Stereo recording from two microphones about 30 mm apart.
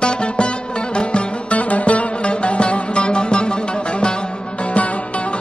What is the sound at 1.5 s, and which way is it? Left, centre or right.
Music, left.